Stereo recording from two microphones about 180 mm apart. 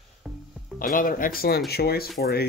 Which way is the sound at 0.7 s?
50° left (ahead or behind).